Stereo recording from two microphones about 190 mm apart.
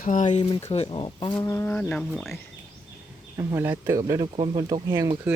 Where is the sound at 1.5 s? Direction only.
10° left (ahead or behind).